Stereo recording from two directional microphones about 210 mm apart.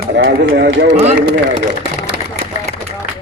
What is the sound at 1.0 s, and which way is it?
Speech, 30° right (ahead or behind).